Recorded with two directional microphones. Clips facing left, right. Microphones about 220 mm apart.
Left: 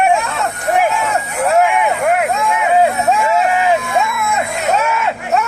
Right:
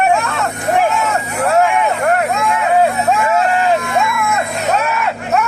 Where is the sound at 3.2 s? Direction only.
15° left (ahead or behind).